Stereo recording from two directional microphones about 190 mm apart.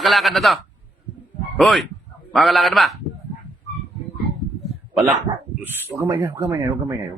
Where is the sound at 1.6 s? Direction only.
5° left (ahead or behind).